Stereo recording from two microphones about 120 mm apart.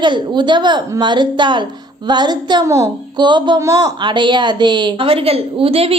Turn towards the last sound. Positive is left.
turn(degrees=-50)  # may be behind; listen again after turning